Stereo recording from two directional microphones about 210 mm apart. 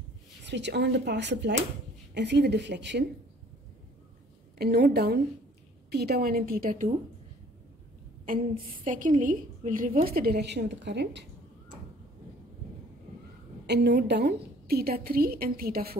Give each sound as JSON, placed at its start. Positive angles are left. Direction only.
{"t": 0.5, "sound": "a woman's voice", "side_deg": -55}
{"t": 4.6, "sound": "a woman's voice", "side_deg": -50}
{"t": 8.8, "sound": "a woman's voice", "side_deg": -40}
{"t": 13.7, "sound": "a woman's voice", "side_deg": -55}